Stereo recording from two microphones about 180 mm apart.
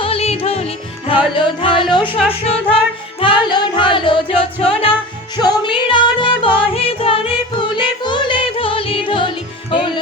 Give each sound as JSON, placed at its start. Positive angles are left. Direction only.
{"t": 0.0, "sound": "music", "side_deg": 35}